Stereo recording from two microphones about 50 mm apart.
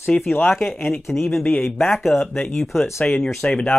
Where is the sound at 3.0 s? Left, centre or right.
Left.